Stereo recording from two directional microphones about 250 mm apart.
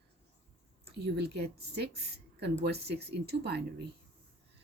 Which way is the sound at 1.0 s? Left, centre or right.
Right.